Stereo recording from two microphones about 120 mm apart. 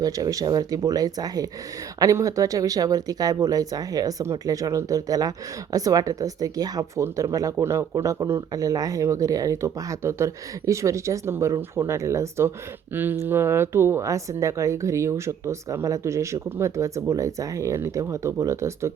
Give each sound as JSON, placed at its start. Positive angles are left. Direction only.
{"t": 0.0, "sound": "a woman's voice", "side_deg": -30}